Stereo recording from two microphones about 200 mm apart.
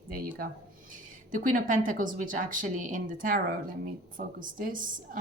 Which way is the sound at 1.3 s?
40° right (ahead or behind).